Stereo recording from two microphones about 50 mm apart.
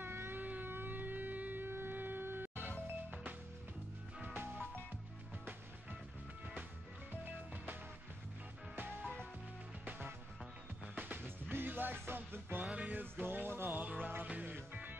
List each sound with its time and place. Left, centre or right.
0.0 s a sound: right
0.4 s music: right
9.0 s music: left
9.8 s music: right